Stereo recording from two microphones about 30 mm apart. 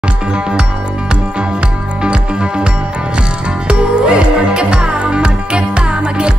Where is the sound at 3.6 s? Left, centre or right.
Right.